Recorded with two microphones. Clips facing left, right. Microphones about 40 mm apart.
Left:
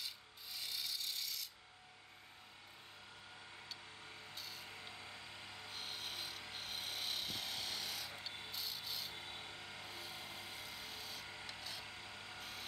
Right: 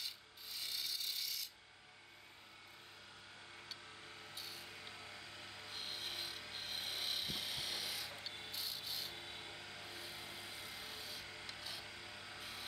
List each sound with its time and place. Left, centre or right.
0.0 s rub: centre
4.4 s a sound: centre
4.7 s music: centre
5.7 s rub: centre
6.5 s filing: centre
8.5 s rub: centre
9.3 s music: centre
9.9 s helicopter: centre
11.2 s music: centre
11.8 s a sound: centre
12.4 s a sound: centre